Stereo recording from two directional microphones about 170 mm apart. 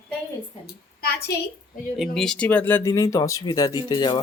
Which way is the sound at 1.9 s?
Centre (ahead or behind).